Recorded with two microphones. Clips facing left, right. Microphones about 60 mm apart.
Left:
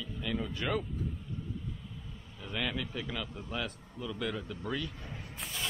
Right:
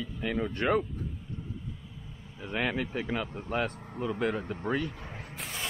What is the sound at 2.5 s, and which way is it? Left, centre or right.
A man's voice, right.